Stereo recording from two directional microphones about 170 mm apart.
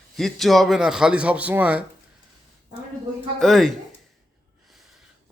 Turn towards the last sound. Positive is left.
turn(degrees=0)  # may be behind; listen again after turning